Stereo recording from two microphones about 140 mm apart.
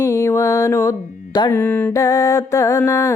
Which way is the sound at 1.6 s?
15° left (ahead or behind).